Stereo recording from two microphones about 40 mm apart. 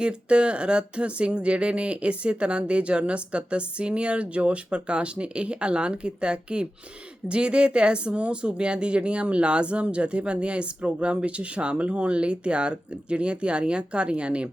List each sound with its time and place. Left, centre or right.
0.0 s speech: right